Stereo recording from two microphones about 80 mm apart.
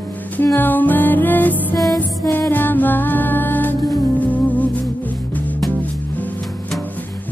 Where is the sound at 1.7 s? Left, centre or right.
Left.